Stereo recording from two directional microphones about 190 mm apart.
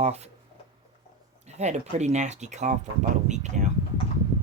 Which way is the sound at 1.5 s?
35° right (ahead or behind).